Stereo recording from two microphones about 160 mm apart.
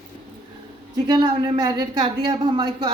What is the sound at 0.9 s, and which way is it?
A woman's voice, 30° right (ahead or behind).